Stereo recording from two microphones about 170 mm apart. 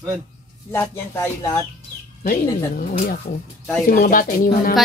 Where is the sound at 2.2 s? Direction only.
55° left (ahead or behind).